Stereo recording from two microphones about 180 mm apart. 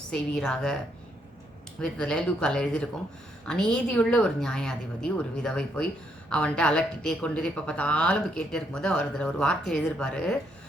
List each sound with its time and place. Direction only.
0.1 s a woman's voice: 5° left (ahead or behind)
1.8 s a woman's voice: 5° left (ahead or behind)